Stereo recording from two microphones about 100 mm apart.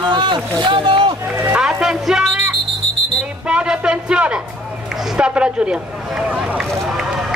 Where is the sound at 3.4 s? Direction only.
10° right (ahead or behind).